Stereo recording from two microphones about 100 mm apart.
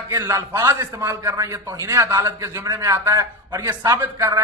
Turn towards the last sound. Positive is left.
turn(degrees=-30)  # may be behind; listen again after turning